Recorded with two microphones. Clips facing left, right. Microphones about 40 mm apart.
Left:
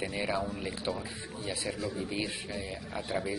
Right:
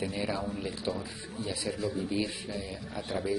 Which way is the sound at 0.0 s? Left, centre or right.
Centre.